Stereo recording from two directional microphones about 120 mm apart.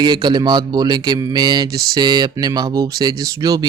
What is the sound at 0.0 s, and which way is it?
Speech, 40° right (ahead or behind).